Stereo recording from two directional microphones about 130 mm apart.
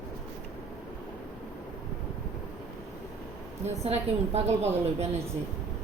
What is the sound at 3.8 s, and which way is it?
A woman's voice, 55° right (ahead or behind).